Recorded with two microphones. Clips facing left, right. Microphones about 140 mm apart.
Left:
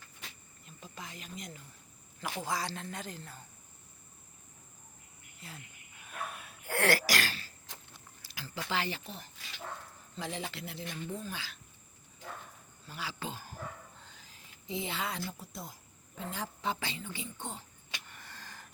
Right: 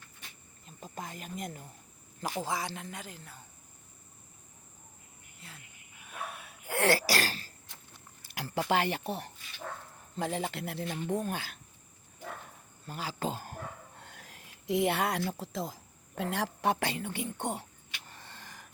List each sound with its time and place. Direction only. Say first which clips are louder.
0.8 s snake: right 5 dB; 45° right (ahead or behind)
2.2 s a woman's voice: right 2 dB; 25° right (ahead or behind)
2.7 s speech: left 1 dB; 10° right (ahead or behind)
6.1 s wheeze: even; 5° right (ahead or behind)
6.7 s throat clearing: right 2 dB; 25° right (ahead or behind)
8.4 s speech: right 7 dB; 65° right (ahead or behind)
10.2 s speech: right 6 dB; 50° right (ahead or behind)
12.8 s speech: right 5 dB; 50° right (ahead or behind); by 17.7 s 65° right (ahead or behind)
18.0 s a sound: right 1 dB; 30° right (ahead or behind)